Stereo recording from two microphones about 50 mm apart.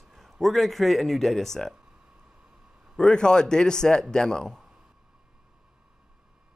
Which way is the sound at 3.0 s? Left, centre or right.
Centre.